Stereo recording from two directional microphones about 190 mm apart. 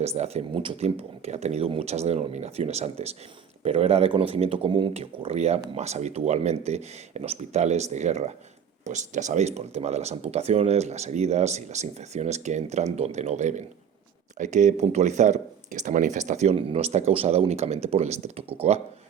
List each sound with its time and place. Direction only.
0.0 s speech: 35° right (ahead or behind)